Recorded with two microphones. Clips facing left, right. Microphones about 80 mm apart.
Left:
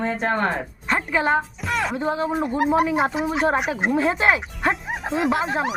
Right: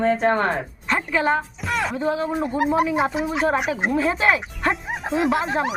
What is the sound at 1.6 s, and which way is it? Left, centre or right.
Music, centre.